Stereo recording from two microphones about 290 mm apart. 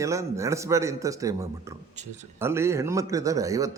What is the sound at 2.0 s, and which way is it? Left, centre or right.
Speech, right.